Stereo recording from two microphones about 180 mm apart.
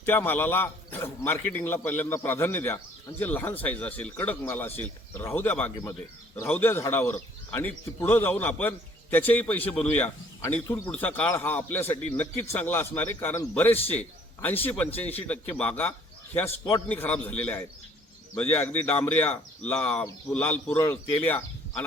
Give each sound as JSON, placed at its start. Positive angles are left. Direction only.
{"t": 0.1, "sound": "a man's voice", "side_deg": 10}
{"t": 16.5, "sound": "a man's voice", "side_deg": 25}
{"t": 16.9, "sound": "a man's voice", "side_deg": 10}